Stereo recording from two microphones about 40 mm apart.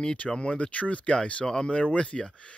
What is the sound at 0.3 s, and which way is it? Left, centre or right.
Speech, left.